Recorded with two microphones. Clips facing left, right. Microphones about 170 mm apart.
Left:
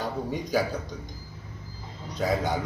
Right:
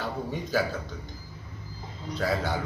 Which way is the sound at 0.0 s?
15° left (ahead or behind).